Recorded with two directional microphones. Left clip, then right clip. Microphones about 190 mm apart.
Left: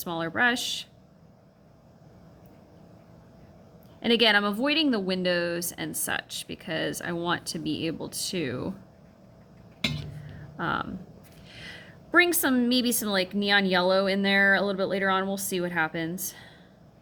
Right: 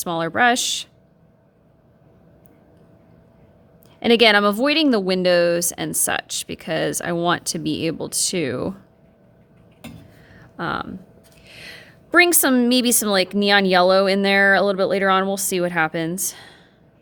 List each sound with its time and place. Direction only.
0.0 s speech: 55° right (ahead or behind)
4.0 s a woman's voice: 55° right (ahead or behind)
10.6 s a woman's voice: 45° right (ahead or behind)